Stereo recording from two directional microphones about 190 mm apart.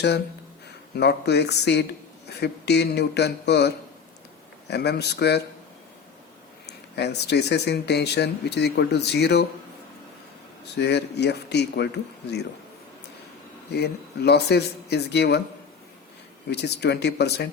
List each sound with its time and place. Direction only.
0.9 s speech: 60° left (ahead or behind)
4.7 s speech: 60° left (ahead or behind)
6.7 s speech: 60° left (ahead or behind)
10.8 s speech: 60° left (ahead or behind)
13.7 s speech: 60° left (ahead or behind)
16.5 s speech: 60° left (ahead or behind)